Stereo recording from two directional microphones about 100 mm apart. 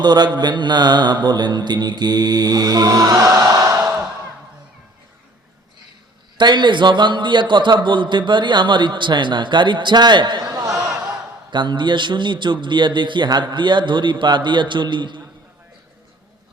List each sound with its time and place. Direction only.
0.0 s a man's voice: 45° right (ahead or behind); by 3.9 s 30° right (ahead or behind)
6.3 s a man's voice: 50° right (ahead or behind)
11.5 s a man's voice: 50° right (ahead or behind)